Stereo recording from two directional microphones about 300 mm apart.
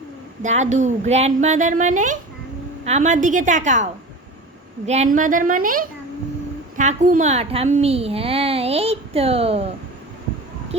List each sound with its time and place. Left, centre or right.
0.4 s a child's voice: right
4.9 s a child's voice: right